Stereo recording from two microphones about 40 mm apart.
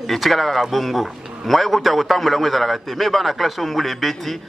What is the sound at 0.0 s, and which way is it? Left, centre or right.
A man's voice, centre.